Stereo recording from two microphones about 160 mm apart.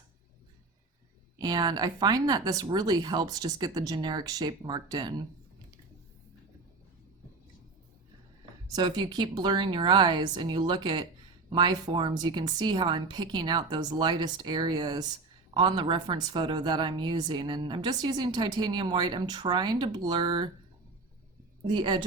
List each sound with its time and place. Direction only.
1.4 s a woman's voice: 25° right (ahead or behind)
8.6 s a woman's voice: 25° right (ahead or behind)
21.7 s a woman's voice: 30° right (ahead or behind)